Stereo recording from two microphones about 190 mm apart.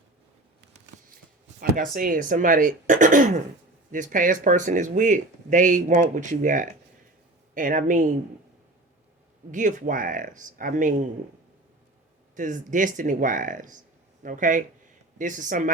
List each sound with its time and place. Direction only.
1.6 s speech: 50° right (ahead or behind)
9.5 s speech: 40° right (ahead or behind)
12.4 s speech: 40° right (ahead or behind)